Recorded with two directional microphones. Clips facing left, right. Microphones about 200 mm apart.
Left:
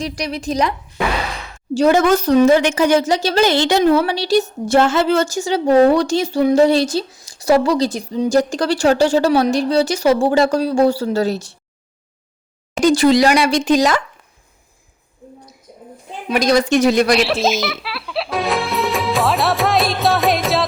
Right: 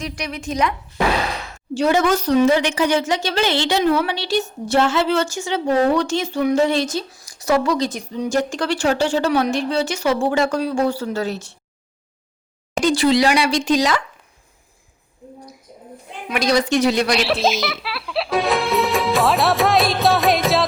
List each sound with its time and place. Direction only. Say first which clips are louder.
0.0 s a woman's voice: left 4 dB; 35° left (ahead or behind)
12.8 s speech: left 4 dB; 45° left (ahead or behind)
16.3 s speech: left 3 dB; 45° left (ahead or behind)
17.1 s speech: left 3 dB; centre (ahead or behind)